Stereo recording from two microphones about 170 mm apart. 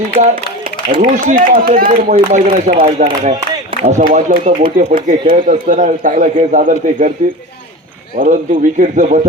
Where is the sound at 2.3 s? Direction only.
40° right (ahead or behind).